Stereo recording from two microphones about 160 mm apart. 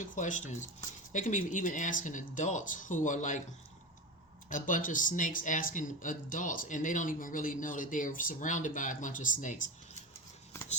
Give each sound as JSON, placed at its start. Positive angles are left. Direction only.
{"t": 0.2, "sound": "speech", "side_deg": 50}
{"t": 4.4, "sound": "speech", "side_deg": 55}